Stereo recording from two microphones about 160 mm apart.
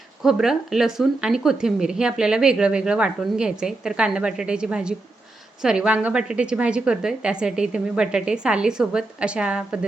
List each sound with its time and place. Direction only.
0.2 s a woman's voice: 5° right (ahead or behind)